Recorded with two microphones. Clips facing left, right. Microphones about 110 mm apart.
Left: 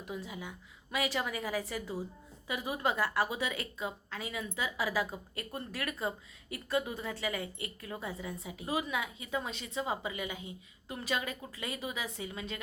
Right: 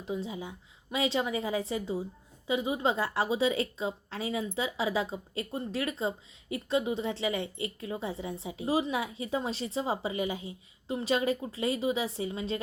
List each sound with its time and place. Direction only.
0.0 s a woman's voice: 25° right (ahead or behind)